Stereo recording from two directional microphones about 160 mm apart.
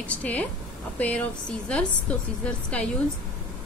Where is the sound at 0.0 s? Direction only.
10° left (ahead or behind).